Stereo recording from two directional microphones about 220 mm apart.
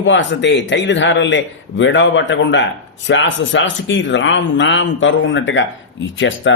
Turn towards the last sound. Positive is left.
turn(degrees=60)  # may be behind; listen again after turning